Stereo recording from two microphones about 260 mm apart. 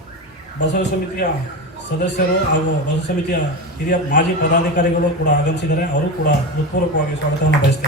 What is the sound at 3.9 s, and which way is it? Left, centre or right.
Speech, left.